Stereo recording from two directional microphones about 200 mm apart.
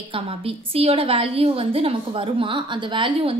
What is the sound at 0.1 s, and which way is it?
A woman's voice, 25° right (ahead or behind).